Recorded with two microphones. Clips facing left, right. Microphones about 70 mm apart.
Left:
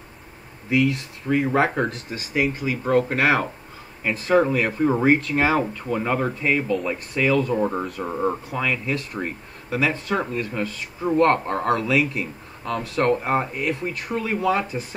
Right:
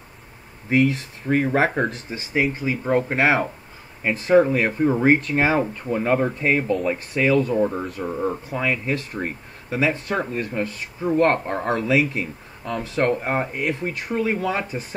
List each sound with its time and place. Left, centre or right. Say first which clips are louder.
0.7 s speech: right 2 dB; right
5.9 s speech: right 3 dB; centre
6.4 s speech: right 2 dB; right
7.5 s speech: right 1 dB; centre
8.5 s speech: right 1 dB; right
13.5 s speech: right 1 dB; right
14.0 s speech: even; right